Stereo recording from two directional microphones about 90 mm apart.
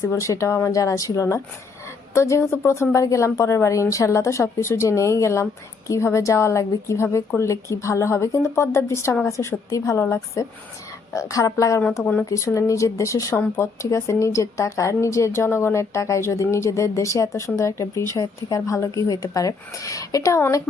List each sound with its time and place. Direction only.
0.1 s speech: 35° left (ahead or behind)